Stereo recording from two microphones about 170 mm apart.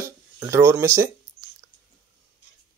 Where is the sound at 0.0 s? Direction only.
15° right (ahead or behind).